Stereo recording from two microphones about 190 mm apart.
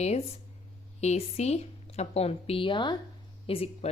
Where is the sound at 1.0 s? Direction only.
35° left (ahead or behind).